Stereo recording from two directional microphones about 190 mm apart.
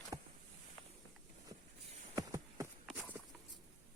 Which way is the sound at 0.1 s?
25° right (ahead or behind).